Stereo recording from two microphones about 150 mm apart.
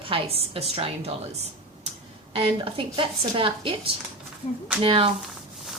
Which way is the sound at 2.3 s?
35° right (ahead or behind).